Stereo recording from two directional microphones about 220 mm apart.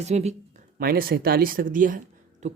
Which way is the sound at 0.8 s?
45° right (ahead or behind).